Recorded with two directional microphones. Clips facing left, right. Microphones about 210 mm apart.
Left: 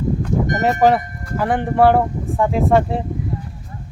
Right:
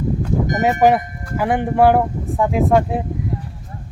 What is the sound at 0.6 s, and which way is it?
Speech, 10° right (ahead or behind).